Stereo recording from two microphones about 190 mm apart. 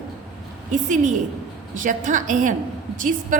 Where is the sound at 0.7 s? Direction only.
40° right (ahead or behind).